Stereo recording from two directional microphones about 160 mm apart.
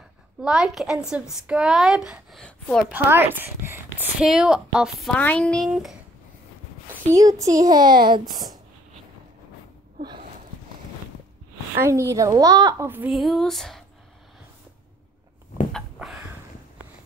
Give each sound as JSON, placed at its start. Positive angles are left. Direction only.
{"t": 0.4, "sound": "a woman's voice", "side_deg": -5}
{"t": 2.9, "sound": "a woman's voice", "side_deg": -15}
{"t": 7.2, "sound": "a child's voice", "side_deg": -20}
{"t": 11.7, "sound": "a child's voice", "side_deg": -15}
{"t": 13.1, "sound": "a woman's voice", "side_deg": 0}
{"t": 15.7, "sound": "a sound", "side_deg": 0}